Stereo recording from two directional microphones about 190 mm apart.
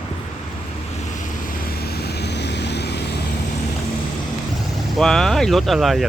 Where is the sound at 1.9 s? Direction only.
60° left (ahead or behind).